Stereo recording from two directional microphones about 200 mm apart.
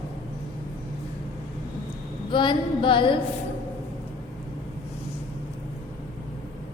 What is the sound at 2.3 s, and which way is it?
Speech, 25° left (ahead or behind).